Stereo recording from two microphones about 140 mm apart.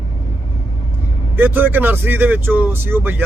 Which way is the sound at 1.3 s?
15° right (ahead or behind).